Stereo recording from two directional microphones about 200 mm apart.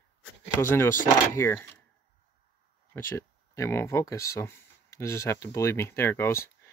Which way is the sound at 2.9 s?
10° left (ahead or behind).